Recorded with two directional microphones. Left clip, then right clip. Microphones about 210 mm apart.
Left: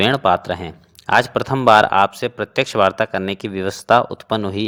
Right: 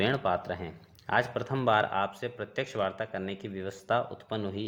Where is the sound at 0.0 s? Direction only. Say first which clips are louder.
Left 13 dB; 30° left (ahead or behind).